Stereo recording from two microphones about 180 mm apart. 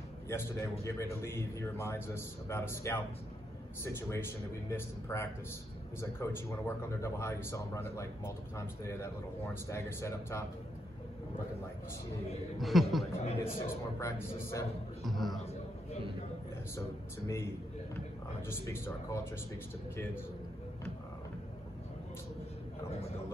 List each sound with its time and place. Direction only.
0.3 s speech: 15° left (ahead or behind)
12.5 s speech: centre (ahead or behind)
13.4 s speech: 15° left (ahead or behind)
15.0 s speech: centre (ahead or behind)
18.5 s speech: 15° left (ahead or behind)